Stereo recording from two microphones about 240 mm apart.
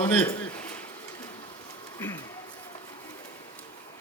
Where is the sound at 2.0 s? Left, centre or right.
Centre.